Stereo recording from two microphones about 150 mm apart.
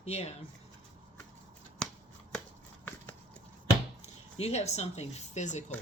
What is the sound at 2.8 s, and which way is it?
Clip-clop, 15° left (ahead or behind).